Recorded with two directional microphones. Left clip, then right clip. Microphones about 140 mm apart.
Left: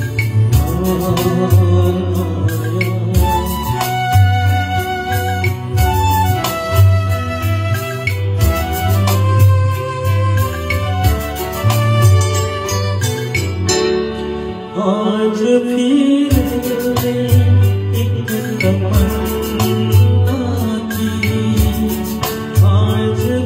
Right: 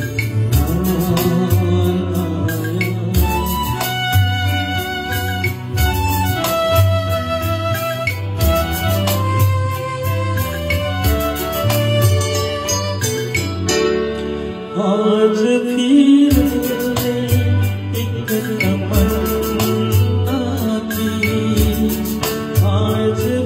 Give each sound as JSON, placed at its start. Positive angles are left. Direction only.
{"t": 0.8, "sound": "music", "side_deg": -40}
{"t": 5.9, "sound": "organ", "side_deg": -35}
{"t": 11.7, "sound": "organ", "side_deg": -35}
{"t": 13.7, "sound": "music", "side_deg": -35}
{"t": 18.3, "sound": "music", "side_deg": -35}